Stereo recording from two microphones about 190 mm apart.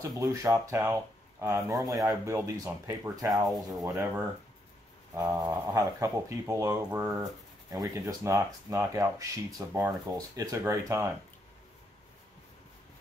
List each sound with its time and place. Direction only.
0.1 s speech: 15° right (ahead or behind)
3.4 s speech: centre (ahead or behind)
3.8 s speech: 15° right (ahead or behind)
5.1 s speech: 15° right (ahead or behind)